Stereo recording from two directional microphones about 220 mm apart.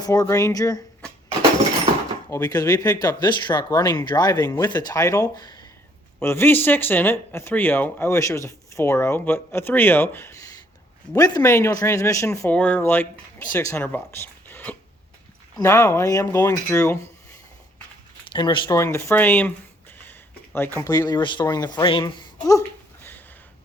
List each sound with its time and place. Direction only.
0.0 s speech: 15° left (ahead or behind)
2.3 s speech: 15° left (ahead or behind)
18.3 s speech: 20° left (ahead or behind)